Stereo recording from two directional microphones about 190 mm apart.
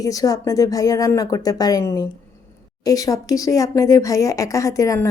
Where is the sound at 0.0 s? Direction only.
20° left (ahead or behind).